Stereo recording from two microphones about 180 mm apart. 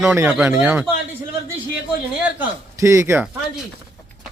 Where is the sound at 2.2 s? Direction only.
15° right (ahead or behind).